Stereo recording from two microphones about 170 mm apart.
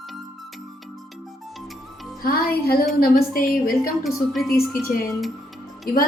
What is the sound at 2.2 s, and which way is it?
Music, 60° left (ahead or behind).